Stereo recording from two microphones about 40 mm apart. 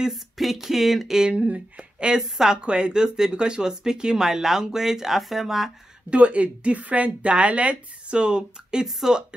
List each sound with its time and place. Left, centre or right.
0.1 s speech: centre
1.4 s speech: right
2.1 s speech: centre
6.0 s a woman's voice: right